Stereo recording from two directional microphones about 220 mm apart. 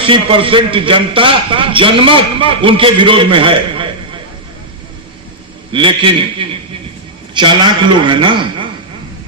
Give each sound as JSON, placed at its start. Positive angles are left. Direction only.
{"t": 0.0, "sound": "a man's voice", "side_deg": -25}
{"t": 5.7, "sound": "a man's voice", "side_deg": -20}